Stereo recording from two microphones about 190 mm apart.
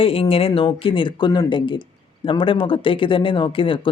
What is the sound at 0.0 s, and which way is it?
Speech, 30° left (ahead or behind).